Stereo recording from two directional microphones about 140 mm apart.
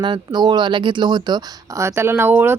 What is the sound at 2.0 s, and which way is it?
Speech, 15° right (ahead or behind).